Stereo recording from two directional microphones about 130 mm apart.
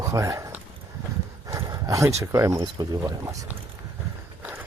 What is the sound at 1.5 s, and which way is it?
Speech, 25° right (ahead or behind).